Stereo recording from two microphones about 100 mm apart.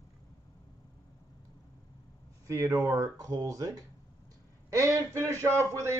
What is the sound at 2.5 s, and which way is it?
A man's voice, 35° right (ahead or behind).